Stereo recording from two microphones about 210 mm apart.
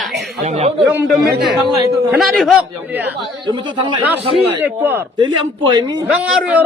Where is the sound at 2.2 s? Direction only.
Centre (ahead or behind).